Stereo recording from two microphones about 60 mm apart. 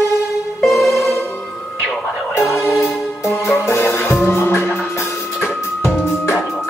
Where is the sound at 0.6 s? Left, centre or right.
Centre.